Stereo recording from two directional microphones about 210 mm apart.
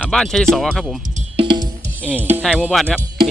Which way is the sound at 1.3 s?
20° right (ahead or behind).